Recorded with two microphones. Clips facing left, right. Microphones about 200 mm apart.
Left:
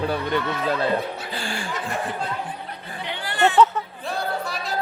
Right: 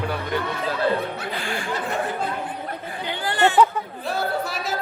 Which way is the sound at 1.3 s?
30° left (ahead or behind).